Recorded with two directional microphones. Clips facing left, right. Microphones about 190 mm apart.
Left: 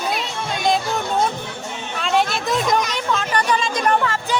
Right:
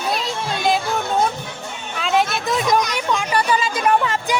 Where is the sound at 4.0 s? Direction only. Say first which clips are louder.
Right 1 dB; 15° right (ahead or behind).